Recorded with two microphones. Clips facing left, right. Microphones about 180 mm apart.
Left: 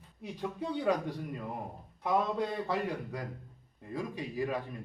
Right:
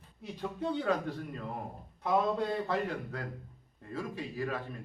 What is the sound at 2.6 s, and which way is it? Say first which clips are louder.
A man's voice: even; 15° left (ahead or behind).